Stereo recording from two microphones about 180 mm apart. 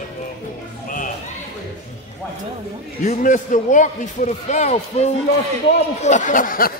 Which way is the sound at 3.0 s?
45° left (ahead or behind).